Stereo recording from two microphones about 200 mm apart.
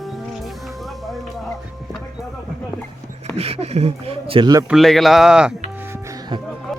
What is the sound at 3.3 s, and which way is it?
Speech, 30° right (ahead or behind).